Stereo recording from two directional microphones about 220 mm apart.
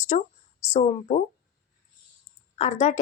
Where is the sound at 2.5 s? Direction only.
30° left (ahead or behind).